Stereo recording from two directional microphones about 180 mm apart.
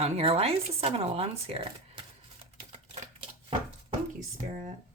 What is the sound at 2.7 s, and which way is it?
Typewriter, 35° right (ahead or behind).